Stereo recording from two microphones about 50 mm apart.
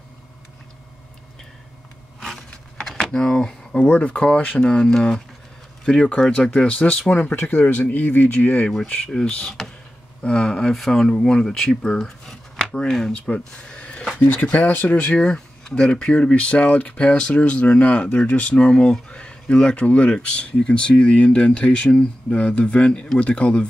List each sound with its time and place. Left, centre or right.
2.1 s a sound: centre
3.8 s speech: left
4.6 s speech: centre
6.3 s speech: left
7.4 s speech: left
9.1 s speech: centre
13.6 s a sound: left
14.1 s speech: left
15.0 s speech: centre
18.7 s speech: centre